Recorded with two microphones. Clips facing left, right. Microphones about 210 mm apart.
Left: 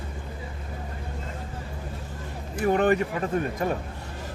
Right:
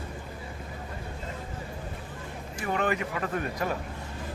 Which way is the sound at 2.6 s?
35° left (ahead or behind).